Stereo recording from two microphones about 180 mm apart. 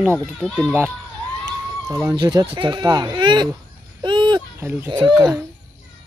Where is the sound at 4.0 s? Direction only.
25° right (ahead or behind).